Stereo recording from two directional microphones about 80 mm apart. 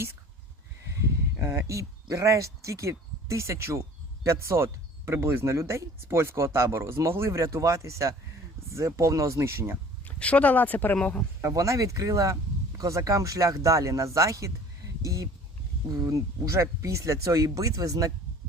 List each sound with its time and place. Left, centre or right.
1.4 s speech: right
10.1 s speech: centre
11.4 s speech: right